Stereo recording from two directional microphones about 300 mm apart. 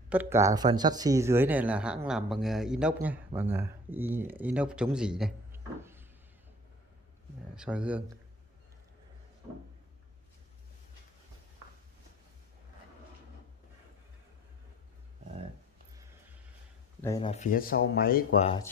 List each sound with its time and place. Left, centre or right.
0.1 s a man's voice: centre
7.5 s speech: centre
17.0 s speech: centre